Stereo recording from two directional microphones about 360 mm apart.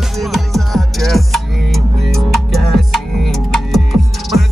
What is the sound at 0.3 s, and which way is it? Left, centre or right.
Music, centre.